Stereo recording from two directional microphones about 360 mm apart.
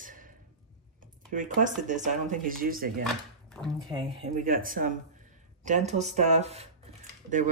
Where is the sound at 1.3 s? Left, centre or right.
Right.